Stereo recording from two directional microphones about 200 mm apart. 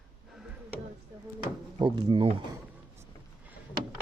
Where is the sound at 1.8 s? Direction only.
25° right (ahead or behind).